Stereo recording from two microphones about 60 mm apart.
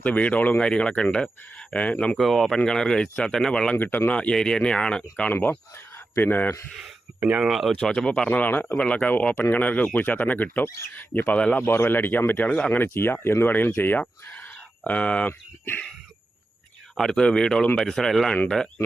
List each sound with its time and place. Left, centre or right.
0.0 s speech: left
2.1 s speech: centre
3.8 s speech: left; by 5.0 s centre
5.3 s speech: left
7.1 s a sound: centre
7.4 s speech: centre
7.7 s speech: centre
8.3 s speech: left
15.3 s speech: left
17.0 s speech: centre